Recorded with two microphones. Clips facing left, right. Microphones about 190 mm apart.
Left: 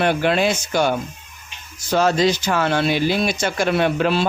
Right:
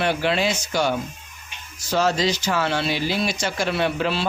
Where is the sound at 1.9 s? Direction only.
55° left (ahead or behind).